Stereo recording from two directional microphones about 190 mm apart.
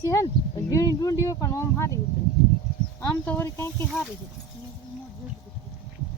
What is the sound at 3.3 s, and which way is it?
Speech, 10° left (ahead or behind).